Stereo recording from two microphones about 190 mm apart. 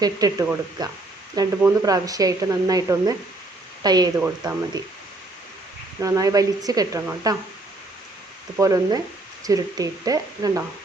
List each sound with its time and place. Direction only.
0.0 s speech: 20° right (ahead or behind)
6.0 s speech: 15° right (ahead or behind)
8.5 s speech: 15° right (ahead or behind)